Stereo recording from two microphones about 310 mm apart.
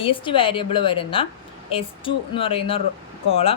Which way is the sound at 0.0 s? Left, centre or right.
Centre.